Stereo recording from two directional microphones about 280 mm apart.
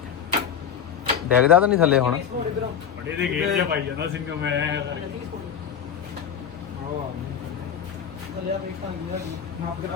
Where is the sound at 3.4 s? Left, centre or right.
Right.